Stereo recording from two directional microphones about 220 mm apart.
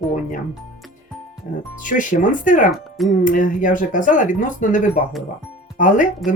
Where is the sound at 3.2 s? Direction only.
35° left (ahead or behind).